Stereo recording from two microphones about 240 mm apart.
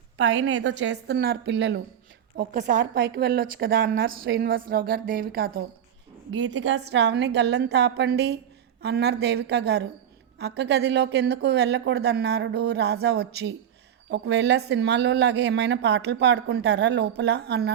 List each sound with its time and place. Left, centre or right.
0.2 s a woman's voice: right
6.3 s speech: right